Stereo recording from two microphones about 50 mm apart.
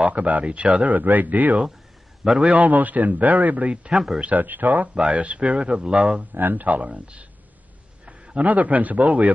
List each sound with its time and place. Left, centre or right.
0.1 s a man's voice: right
4.2 s a man's voice: right
4.9 s speech: right
6.3 s a man's voice: right